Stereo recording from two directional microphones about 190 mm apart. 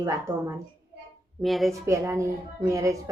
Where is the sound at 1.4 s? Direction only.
Centre (ahead or behind).